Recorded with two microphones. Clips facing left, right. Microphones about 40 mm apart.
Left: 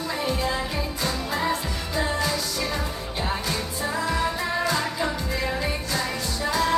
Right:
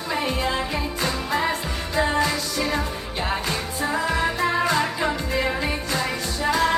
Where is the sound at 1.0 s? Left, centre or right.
Right.